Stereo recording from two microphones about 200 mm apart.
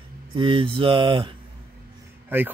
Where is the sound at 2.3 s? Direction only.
10° right (ahead or behind).